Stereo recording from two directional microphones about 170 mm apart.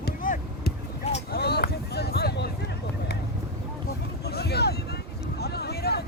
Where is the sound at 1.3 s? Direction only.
70° left (ahead or behind).